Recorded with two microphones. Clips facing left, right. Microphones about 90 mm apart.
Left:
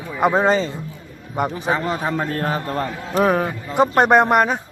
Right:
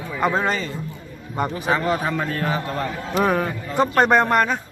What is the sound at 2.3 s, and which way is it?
Speech, 40° left (ahead or behind).